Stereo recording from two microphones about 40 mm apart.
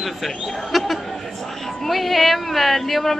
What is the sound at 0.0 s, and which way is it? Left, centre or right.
Speech, centre.